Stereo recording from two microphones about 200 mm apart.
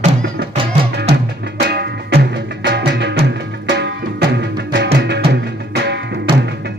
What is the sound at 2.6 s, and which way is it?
Music, 60° right (ahead or behind).